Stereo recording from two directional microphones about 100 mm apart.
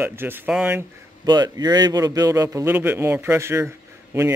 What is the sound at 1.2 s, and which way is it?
A man's voice, 45° right (ahead or behind).